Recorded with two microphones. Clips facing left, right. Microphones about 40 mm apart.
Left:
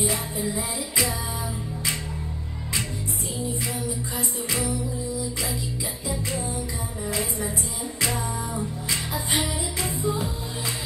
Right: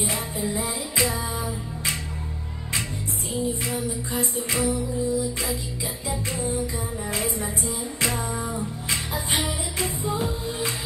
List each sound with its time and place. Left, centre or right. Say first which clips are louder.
0.0 s music: left 1 dB; right
3.4 s music: right 1 dB; right
8.8 s music: even; right